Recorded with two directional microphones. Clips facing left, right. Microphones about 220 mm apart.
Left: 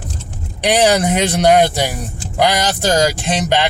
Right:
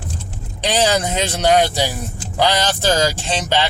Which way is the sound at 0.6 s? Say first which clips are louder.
Left 4 dB; 15° left (ahead or behind).